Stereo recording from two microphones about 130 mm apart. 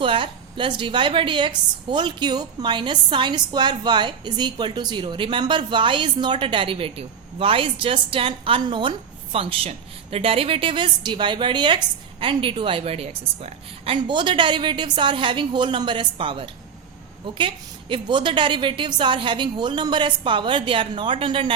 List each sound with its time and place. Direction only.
0.0 s a woman's voice: 40° right (ahead or behind)